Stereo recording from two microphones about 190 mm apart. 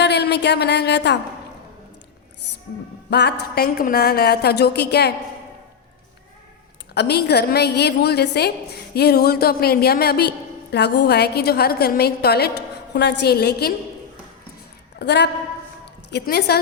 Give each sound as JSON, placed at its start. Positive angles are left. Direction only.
{"t": 0.0, "sound": "a woman's voice", "side_deg": 60}
{"t": 3.1, "sound": "a woman's voice", "side_deg": 60}
{"t": 6.9, "sound": "a woman's voice", "side_deg": 60}
{"t": 14.9, "sound": "a woman's voice", "side_deg": 65}